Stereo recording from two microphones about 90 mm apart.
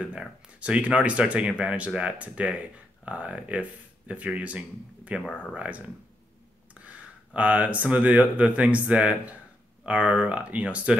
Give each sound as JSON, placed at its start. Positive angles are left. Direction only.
{"t": 0.0, "sound": "speech", "side_deg": -15}
{"t": 5.2, "sound": "speech", "side_deg": 15}
{"t": 5.5, "sound": "speech", "side_deg": -15}